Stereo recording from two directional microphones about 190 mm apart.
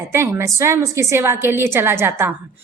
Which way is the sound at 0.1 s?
15° right (ahead or behind).